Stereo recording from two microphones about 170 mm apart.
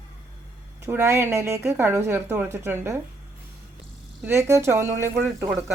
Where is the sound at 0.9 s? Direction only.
15° right (ahead or behind).